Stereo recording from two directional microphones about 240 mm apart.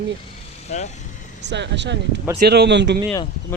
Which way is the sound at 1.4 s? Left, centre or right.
Right.